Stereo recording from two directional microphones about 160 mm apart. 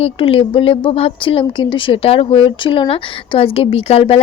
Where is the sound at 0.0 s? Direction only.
35° left (ahead or behind).